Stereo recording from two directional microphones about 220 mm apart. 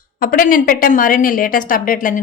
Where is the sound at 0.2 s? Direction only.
40° left (ahead or behind).